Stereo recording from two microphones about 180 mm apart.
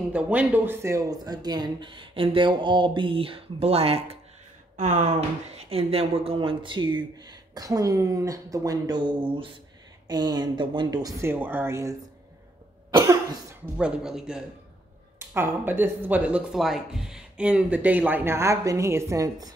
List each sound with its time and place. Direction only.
0.1 s speech: 10° right (ahead or behind)
12.9 s cough: 20° right (ahead or behind)
13.7 s speech: 5° right (ahead or behind); by 19.5 s 20° right (ahead or behind)